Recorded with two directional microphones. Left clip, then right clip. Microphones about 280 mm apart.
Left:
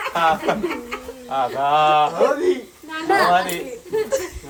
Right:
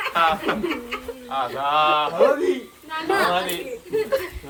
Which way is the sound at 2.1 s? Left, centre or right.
Centre.